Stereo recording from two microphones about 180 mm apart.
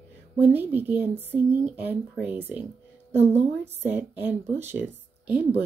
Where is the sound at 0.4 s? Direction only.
10° right (ahead or behind).